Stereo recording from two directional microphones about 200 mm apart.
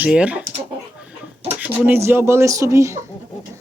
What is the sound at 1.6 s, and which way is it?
A woman's voice, 10° right (ahead or behind).